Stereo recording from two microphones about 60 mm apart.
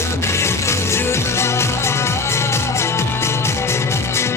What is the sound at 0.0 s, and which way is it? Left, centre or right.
Music, left.